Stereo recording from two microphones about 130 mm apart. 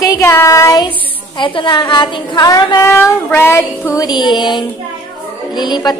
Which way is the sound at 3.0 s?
15° left (ahead or behind).